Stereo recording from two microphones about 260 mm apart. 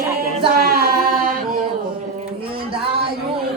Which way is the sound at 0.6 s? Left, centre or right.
Right.